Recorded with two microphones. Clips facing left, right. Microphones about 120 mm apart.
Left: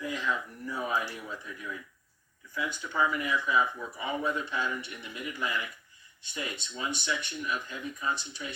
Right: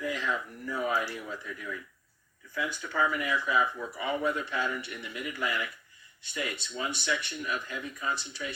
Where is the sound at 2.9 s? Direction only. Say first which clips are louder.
Even; 25° left (ahead or behind).